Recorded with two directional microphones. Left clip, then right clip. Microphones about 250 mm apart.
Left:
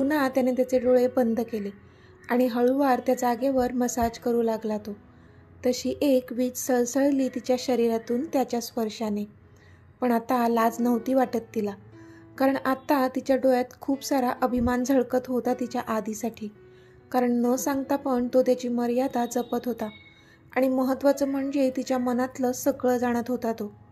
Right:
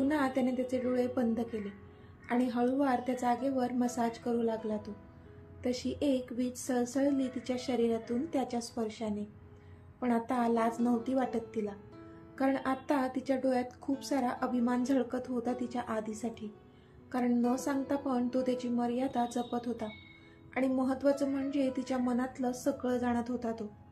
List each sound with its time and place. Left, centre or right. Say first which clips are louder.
0.1 s a woman's voice: left 7 dB; left